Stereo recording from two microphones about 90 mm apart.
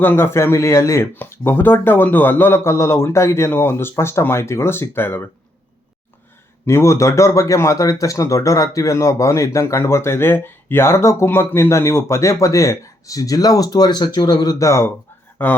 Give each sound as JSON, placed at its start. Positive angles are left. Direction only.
{"t": 0.0, "sound": "speech", "side_deg": 25}
{"t": 6.7, "sound": "speech", "side_deg": 35}
{"t": 14.6, "sound": "speech", "side_deg": 35}
{"t": 15.4, "sound": "speech", "side_deg": 20}